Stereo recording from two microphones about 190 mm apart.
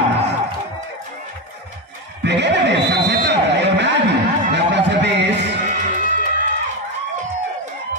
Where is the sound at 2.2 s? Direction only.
65° right (ahead or behind).